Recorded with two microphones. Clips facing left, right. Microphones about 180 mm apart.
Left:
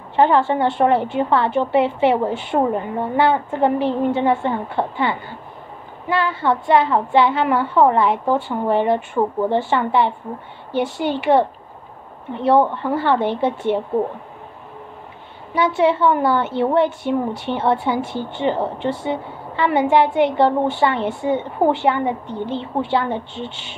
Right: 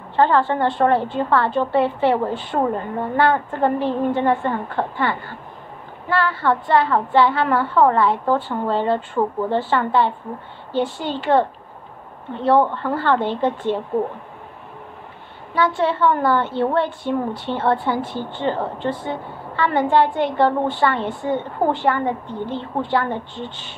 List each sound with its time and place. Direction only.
0.1 s speech: 20° left (ahead or behind)
15.5 s speech: 15° left (ahead or behind)